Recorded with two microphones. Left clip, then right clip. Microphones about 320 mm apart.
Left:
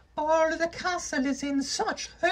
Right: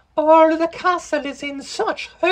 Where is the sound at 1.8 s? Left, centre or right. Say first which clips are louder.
Right 10 dB; right.